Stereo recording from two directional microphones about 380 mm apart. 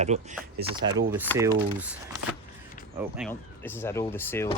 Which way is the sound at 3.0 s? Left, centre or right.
Centre.